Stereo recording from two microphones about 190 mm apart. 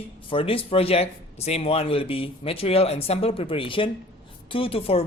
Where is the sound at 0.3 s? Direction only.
30° left (ahead or behind).